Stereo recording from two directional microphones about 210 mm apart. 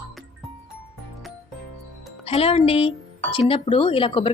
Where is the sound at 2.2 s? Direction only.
30° left (ahead or behind).